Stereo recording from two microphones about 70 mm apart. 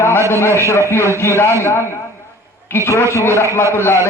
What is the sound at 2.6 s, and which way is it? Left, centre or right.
A man's voice, left.